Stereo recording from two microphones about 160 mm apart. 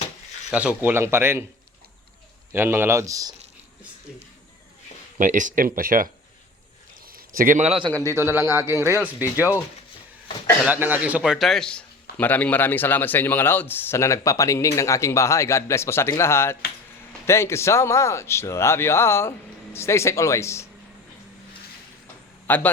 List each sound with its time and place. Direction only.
0.5 s a man's voice: 10° right (ahead or behind)
2.5 s a man's voice: 15° right (ahead or behind)
5.1 s speech: 50° right (ahead or behind)
7.3 s a man's voice: 55° right (ahead or behind); by 9.0 s 15° right (ahead or behind)
10.7 s a man's voice: 10° right (ahead or behind); by 20.7 s 15° left (ahead or behind)
22.4 s a man's voice: 10° left (ahead or behind)